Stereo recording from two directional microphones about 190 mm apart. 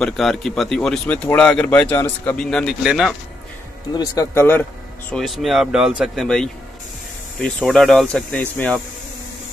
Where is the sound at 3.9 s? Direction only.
20° left (ahead or behind).